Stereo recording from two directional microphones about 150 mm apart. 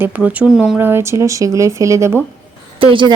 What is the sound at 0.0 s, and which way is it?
Speech, 10° right (ahead or behind).